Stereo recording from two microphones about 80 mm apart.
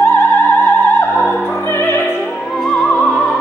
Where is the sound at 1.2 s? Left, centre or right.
Left.